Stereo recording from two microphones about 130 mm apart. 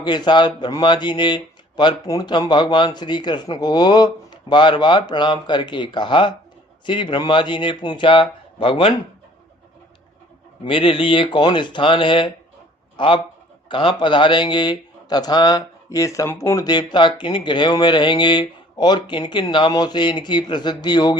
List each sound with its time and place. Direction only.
0.0 s a man's voice: 35° left (ahead or behind)
10.6 s a man's voice: 45° left (ahead or behind)